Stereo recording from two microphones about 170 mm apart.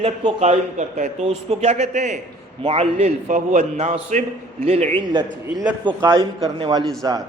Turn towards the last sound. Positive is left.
turn(degrees=-25)  # may be behind; listen again after turning